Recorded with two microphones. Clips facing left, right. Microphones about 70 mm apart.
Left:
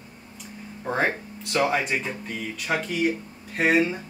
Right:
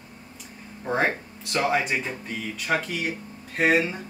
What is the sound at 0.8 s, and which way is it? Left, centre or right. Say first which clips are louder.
Speech: even; centre.